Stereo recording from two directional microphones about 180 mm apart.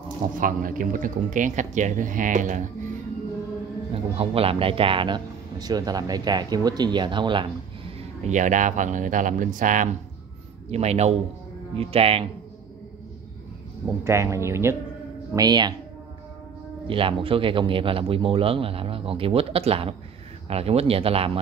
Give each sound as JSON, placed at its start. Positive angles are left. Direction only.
{"t": 0.3, "sound": "a man's voice", "side_deg": -50}
{"t": 3.9, "sound": "a man's voice", "side_deg": -30}
{"t": 8.2, "sound": "a man's voice", "side_deg": -40}
{"t": 14.0, "sound": "a man's voice", "side_deg": -15}
{"t": 16.8, "sound": "speech", "side_deg": -30}